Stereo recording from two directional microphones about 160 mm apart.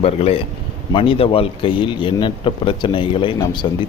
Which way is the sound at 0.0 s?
35° left (ahead or behind).